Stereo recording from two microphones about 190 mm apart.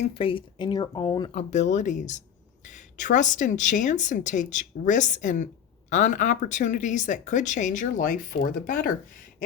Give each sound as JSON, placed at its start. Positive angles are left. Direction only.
{"t": 0.0, "sound": "speech", "side_deg": 30}
{"t": 1.4, "sound": "speech", "side_deg": 40}